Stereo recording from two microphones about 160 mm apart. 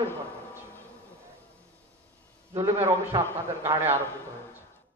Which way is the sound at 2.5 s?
15° right (ahead or behind).